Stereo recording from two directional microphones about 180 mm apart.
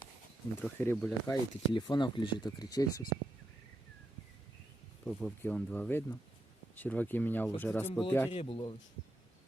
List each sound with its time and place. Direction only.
0.6 s speech: 10° left (ahead or behind)
1.7 s speech: 25° left (ahead or behind)
5.0 s speech: 5° left (ahead or behind)
8.3 s speech: 30° left (ahead or behind)